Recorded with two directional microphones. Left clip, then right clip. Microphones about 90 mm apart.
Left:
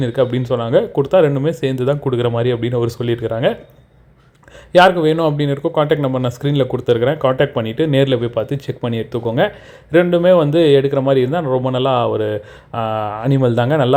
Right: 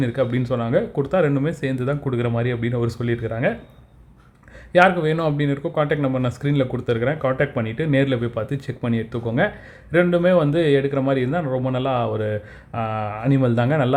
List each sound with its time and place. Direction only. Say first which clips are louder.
0.1 s speech: left 6 dB; 25° left (ahead or behind)
4.7 s speech: left 5 dB; 30° left (ahead or behind)